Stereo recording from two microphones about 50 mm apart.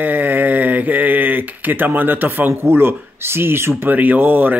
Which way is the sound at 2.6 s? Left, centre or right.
Right.